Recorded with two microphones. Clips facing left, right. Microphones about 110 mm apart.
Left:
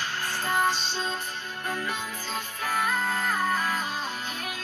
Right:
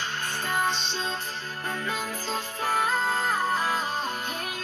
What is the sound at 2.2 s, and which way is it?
Music, 30° right (ahead or behind).